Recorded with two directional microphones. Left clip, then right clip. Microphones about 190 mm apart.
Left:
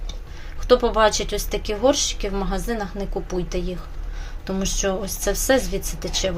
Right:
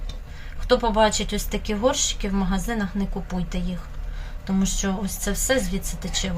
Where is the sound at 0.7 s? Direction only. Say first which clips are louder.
Left 3 dB; 30° left (ahead or behind).